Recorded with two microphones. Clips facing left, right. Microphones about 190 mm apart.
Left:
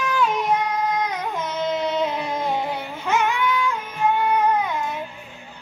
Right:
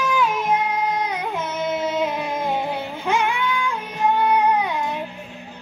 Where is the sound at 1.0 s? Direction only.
10° right (ahead or behind).